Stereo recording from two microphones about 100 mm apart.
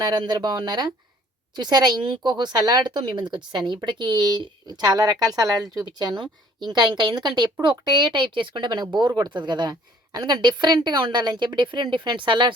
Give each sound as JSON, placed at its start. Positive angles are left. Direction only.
{"t": 0.0, "sound": "speech", "side_deg": -45}